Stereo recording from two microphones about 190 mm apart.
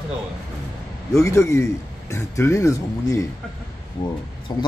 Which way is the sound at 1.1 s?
15° left (ahead or behind).